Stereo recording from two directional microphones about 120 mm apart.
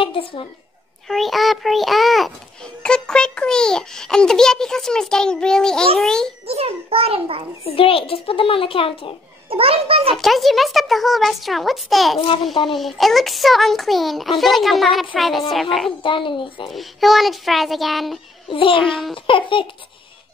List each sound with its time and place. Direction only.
0.0 s a woman's voice: 45° left (ahead or behind)
1.0 s a child's voice: centre (ahead or behind)
6.4 s a child's voice: 55° right (ahead or behind)
7.6 s a child's voice: 50° left (ahead or behind)
9.5 s a child's voice: 55° right (ahead or behind)
10.1 s a child's voice: centre (ahead or behind)
16.0 s a child's voice: 45° left (ahead or behind)
16.7 s a child's voice: centre (ahead or behind)
18.5 s a child's voice: 45° left (ahead or behind)